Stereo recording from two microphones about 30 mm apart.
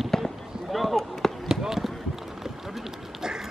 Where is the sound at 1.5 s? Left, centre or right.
Centre.